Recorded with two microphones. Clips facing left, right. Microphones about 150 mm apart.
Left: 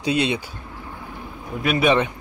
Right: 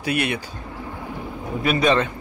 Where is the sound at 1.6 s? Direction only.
5° left (ahead or behind).